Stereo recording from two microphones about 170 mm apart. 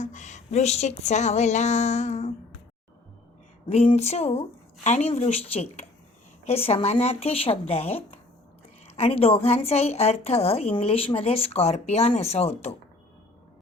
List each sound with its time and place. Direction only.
0.0 s speech: 45° left (ahead or behind)
3.7 s a woman's voice: 40° left (ahead or behind)